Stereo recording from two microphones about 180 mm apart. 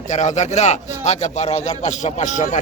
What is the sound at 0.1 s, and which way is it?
A man's voice, 40° left (ahead or behind).